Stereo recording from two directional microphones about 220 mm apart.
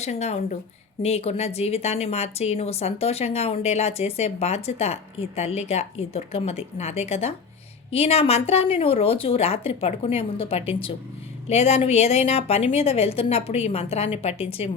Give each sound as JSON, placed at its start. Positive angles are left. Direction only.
{"t": 0.0, "sound": "a woman's voice", "side_deg": 30}